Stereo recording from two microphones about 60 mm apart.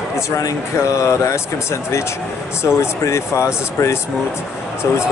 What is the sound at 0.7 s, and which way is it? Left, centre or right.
Speech, left.